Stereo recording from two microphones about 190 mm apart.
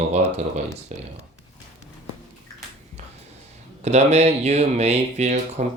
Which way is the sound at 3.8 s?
35° right (ahead or behind).